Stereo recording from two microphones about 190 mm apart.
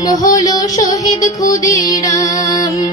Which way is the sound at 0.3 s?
20° left (ahead or behind).